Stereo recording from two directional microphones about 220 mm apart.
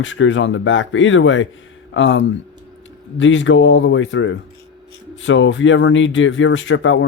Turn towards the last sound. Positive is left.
turn(degrees=60)  # may be behind; listen again after turning